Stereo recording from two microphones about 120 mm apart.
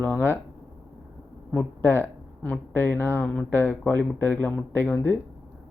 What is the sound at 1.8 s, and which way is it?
Speech, 20° left (ahead or behind).